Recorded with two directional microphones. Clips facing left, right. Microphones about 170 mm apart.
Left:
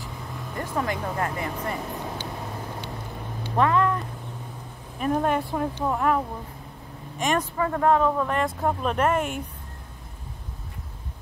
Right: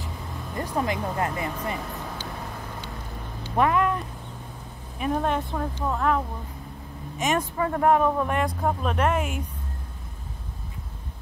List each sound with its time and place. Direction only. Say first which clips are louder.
0.6 s speech: right 1 dB; 20° right (ahead or behind)
3.5 s speech: even; 15° right (ahead or behind)
4.9 s speech: left 2 dB; centre (ahead or behind)
7.2 s speech: even; centre (ahead or behind)
7.5 s speech: right 1 dB; 15° right (ahead or behind)
8.5 s speech: left 1 dB; centre (ahead or behind)